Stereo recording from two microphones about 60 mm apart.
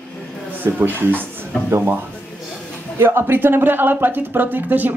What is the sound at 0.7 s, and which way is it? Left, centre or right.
Speech, right.